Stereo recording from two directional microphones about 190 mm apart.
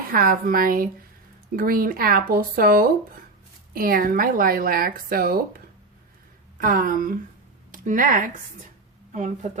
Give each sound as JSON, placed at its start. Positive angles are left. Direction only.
{"t": 0.1, "sound": "speech", "side_deg": -50}